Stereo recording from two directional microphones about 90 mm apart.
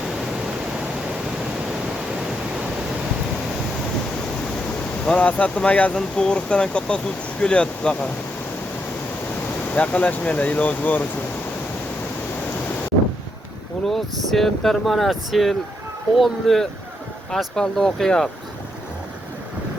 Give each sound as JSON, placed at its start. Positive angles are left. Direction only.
{"t": 5.0, "sound": "speech", "side_deg": 15}
{"t": 9.7, "sound": "speech", "side_deg": 15}
{"t": 13.8, "sound": "speech", "side_deg": 5}